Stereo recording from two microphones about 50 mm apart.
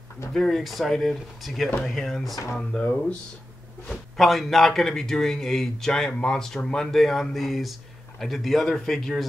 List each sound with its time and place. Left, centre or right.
0.3 s speech: centre
2.7 s speech: centre
4.2 s a man's voice: centre